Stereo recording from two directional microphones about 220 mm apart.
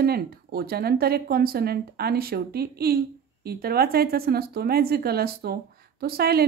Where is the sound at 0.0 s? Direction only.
45° right (ahead or behind).